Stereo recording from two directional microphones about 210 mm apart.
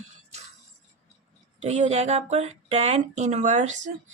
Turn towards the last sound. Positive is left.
turn(degrees=-35)  # may be behind; listen again after turning